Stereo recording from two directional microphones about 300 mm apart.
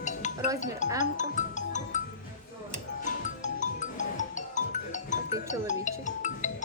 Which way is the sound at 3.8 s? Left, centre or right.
Left.